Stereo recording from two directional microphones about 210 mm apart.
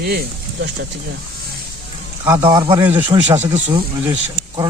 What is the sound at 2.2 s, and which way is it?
Speech, 20° right (ahead or behind).